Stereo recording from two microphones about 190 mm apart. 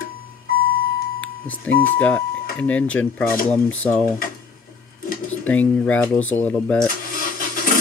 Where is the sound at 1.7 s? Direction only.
10° left (ahead or behind).